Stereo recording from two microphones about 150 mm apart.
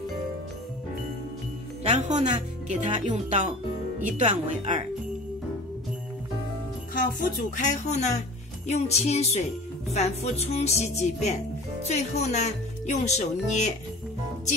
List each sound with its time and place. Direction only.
1.8 s speech: 50° right (ahead or behind)
7.5 s a woman's voice: 55° left (ahead or behind)